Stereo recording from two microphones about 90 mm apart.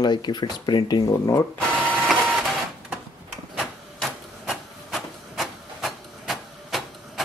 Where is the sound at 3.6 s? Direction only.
5° right (ahead or behind).